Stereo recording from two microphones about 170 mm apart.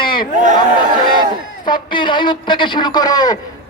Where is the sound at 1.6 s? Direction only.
25° left (ahead or behind).